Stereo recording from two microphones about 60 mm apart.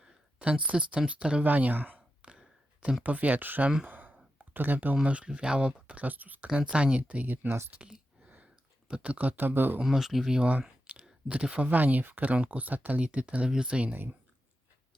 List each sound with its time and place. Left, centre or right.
0.0 s speech: centre
1.5 s speech: right
2.2 s a sound: centre
3.0 s speech: right
3.8 s sigh: right
4.4 s a sound: right
5.0 s speech: centre
6.5 s speech: centre; by 9.8 s right
9.8 s speech: centre
10.8 s speech: centre
13.9 s speech: right